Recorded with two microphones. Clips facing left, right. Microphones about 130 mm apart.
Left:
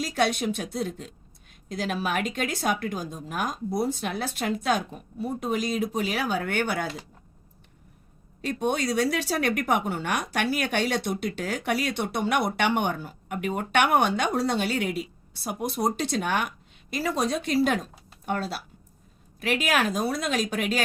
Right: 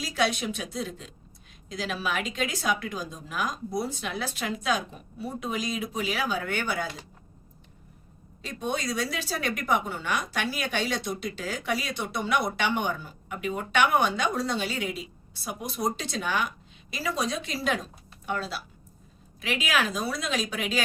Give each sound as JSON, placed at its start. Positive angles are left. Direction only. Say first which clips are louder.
{"t": 0.0, "sound": "speech", "louder": "left 2 dB", "side_deg": 50}
{"t": 8.4, "sound": "speech", "louder": "left 5 dB", "side_deg": 60}